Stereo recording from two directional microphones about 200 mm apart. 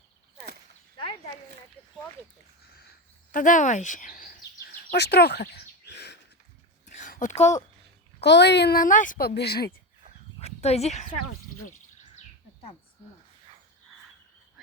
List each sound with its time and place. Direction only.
3.3 s speech: 40° left (ahead or behind)
4.7 s bird vocalization: 50° left (ahead or behind)
6.8 s a sound: 40° left (ahead or behind)
8.2 s a woman's voice: 60° left (ahead or behind)
10.4 s speech: 30° left (ahead or behind)